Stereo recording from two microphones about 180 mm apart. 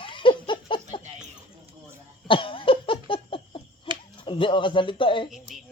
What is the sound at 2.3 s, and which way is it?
Laughter, 30° left (ahead or behind).